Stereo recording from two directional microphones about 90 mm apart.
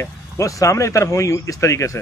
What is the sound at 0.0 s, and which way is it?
A man's voice, 35° left (ahead or behind).